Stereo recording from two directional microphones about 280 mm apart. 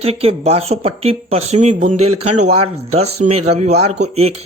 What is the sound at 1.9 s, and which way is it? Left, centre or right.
Speech, right.